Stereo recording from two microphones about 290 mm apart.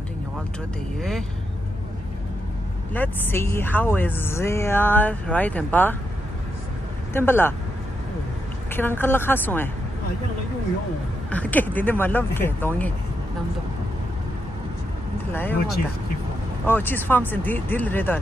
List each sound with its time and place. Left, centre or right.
2.9 s speech: centre
7.2 s speech: centre
8.7 s speech: centre
11.2 s speech: centre
16.6 s speech: centre